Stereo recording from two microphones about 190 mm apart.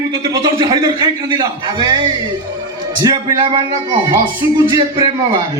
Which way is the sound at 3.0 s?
20° right (ahead or behind).